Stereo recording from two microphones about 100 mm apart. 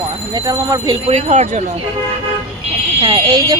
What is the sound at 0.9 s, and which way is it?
Speech, 90° right.